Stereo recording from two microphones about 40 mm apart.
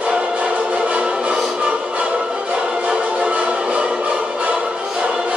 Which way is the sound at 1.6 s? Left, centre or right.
Right.